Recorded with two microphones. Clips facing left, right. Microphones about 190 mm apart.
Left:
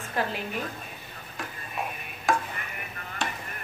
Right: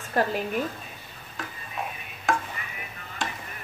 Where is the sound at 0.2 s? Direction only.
45° right (ahead or behind).